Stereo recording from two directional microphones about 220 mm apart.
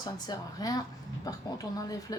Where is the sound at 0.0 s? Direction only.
15° left (ahead or behind).